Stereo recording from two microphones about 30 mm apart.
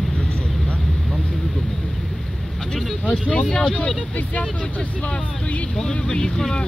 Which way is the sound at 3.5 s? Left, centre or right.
Left.